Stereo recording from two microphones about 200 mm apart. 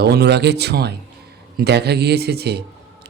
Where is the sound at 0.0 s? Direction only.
55° right (ahead or behind).